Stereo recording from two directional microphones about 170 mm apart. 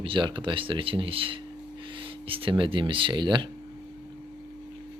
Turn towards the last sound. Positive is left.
turn(degrees=-25)  # may be behind; listen again after turning